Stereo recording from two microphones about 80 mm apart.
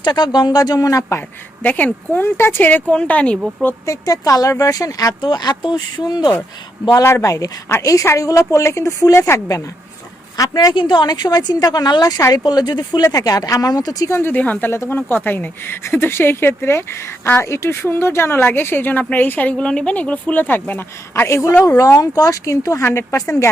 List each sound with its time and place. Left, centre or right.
0.0 s speech: left
1.6 s speech: left
3.8 s speech: left
5.2 s a woman's voice: left
7.0 s speech: left
10.3 s a woman's voice: left
14.1 s speech: left
21.6 s speech: left